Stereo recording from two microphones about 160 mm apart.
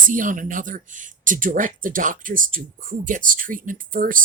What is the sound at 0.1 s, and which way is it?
Speech, 55° right (ahead or behind).